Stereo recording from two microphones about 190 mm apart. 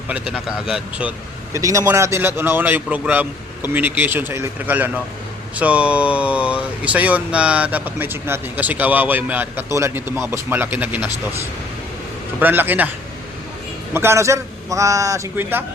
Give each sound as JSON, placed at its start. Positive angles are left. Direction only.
{"t": 0.1, "sound": "speech", "side_deg": -5}
{"t": 1.5, "sound": "speech", "side_deg": -15}
{"t": 12.4, "sound": "speech", "side_deg": -10}
{"t": 13.9, "sound": "speech", "side_deg": -15}